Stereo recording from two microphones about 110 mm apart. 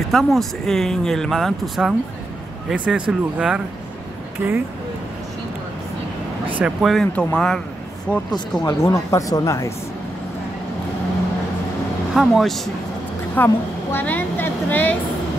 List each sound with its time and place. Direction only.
0.1 s speech: centre (ahead or behind)
4.4 s speech: 20° right (ahead or behind)
6.6 s speech: centre (ahead or behind)
7.1 s speech: 10° left (ahead or behind)
8.1 s speech: 15° right (ahead or behind)
8.6 s speech: 30° left (ahead or behind)
12.1 s speech: centre (ahead or behind)
13.4 s a woman's voice: 15° left (ahead or behind)